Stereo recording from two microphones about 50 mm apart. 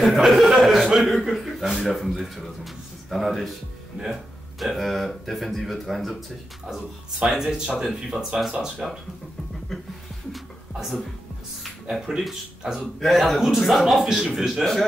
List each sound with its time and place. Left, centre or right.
0.0 s speech: centre
0.6 s chuckle: centre
0.9 s speech: centre
7.2 s speech: centre
10.3 s a sound: centre
12.6 s speech: centre